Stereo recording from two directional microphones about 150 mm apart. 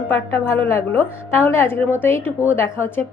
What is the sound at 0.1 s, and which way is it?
A woman's voice, 15° left (ahead or behind).